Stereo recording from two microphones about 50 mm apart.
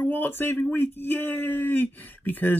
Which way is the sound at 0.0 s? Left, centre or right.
Left.